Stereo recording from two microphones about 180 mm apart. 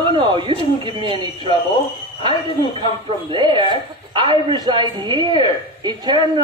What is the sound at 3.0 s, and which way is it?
A man's voice, 30° right (ahead or behind).